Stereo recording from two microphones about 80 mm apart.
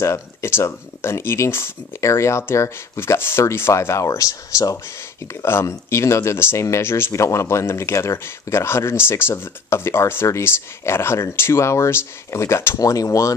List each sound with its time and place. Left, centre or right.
0.0 s speech: left
5.4 s speech: left
12.7 s speech: left